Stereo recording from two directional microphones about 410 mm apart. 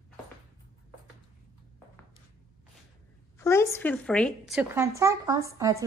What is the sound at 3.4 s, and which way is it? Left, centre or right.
Speech, centre.